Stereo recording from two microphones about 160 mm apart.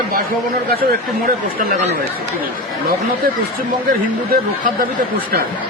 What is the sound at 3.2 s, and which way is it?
Speech, 65° right (ahead or behind).